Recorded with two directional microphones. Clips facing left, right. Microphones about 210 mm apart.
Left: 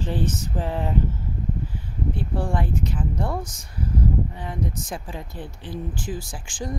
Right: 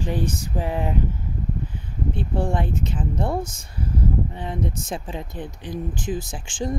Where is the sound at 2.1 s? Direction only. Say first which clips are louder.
Right 3 dB; 25° right (ahead or behind).